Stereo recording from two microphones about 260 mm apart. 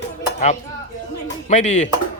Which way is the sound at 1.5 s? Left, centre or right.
Left.